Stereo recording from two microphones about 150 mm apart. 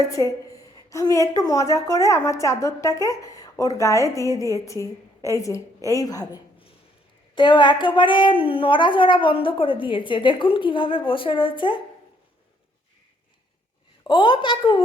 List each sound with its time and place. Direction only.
0.0 s a woman's voice: 20° left (ahead or behind)
14.1 s a woman's voice: 35° left (ahead or behind)